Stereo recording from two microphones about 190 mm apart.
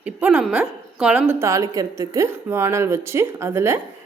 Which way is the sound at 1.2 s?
15° right (ahead or behind).